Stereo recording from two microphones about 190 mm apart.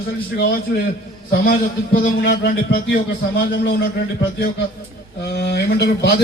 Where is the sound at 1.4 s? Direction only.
45° left (ahead or behind).